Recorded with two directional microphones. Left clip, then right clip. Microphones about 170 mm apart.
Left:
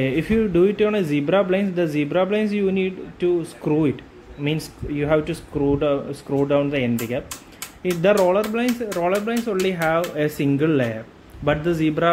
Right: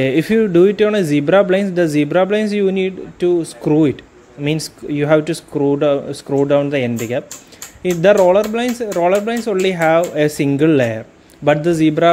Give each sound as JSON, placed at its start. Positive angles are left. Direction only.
{"t": 0.0, "sound": "speech", "side_deg": -40}